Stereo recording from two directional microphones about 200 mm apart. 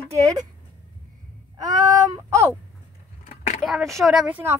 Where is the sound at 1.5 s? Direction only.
20° right (ahead or behind).